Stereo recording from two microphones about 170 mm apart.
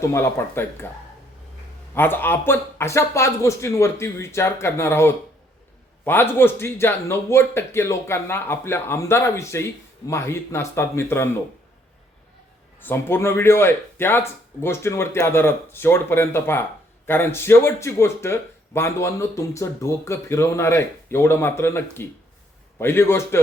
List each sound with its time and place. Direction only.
0.0 s speech: 15° left (ahead or behind)
2.0 s speech: 10° left (ahead or behind)
12.8 s speech: 15° left (ahead or behind)